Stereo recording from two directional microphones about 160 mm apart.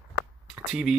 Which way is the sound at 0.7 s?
Centre (ahead or behind).